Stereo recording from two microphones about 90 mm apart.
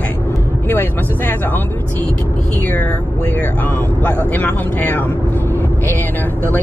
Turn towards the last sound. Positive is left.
turn(degrees=20)  # may be behind; listen again after turning